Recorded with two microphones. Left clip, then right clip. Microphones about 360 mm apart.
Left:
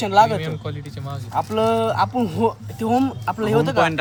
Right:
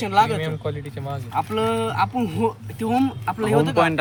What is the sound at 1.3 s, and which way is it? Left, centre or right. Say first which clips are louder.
Speech: left 3 dB; centre.